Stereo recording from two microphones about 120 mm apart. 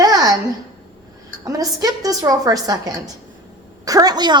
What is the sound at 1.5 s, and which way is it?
A woman's voice, 30° right (ahead or behind).